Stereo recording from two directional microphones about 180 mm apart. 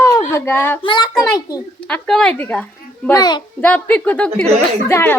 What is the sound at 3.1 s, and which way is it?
Speech, 20° left (ahead or behind).